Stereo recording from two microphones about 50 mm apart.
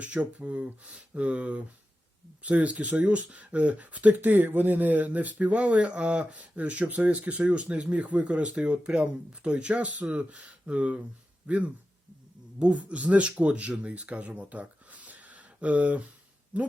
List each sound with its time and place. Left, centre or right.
0.0 s speech: right